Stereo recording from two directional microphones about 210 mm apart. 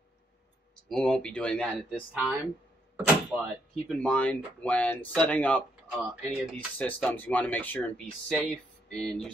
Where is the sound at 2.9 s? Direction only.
5° right (ahead or behind).